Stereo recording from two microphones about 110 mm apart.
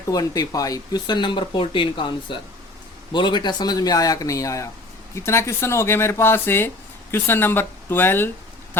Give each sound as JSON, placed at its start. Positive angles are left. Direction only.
{"t": 0.1, "sound": "speech", "side_deg": 35}